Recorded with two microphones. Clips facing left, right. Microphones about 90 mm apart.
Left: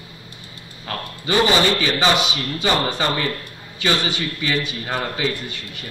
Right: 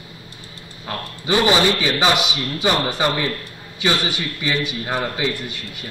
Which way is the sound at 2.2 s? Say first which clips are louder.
Even; 35° left (ahead or behind).